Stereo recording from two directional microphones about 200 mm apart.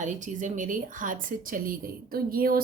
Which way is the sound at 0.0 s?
40° right (ahead or behind).